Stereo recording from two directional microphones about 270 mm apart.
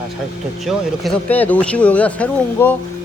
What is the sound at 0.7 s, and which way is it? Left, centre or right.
Speech, centre.